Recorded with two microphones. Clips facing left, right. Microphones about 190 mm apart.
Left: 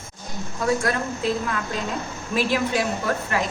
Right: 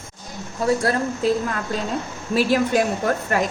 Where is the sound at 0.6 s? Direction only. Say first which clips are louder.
Right 3 dB; 35° right (ahead or behind).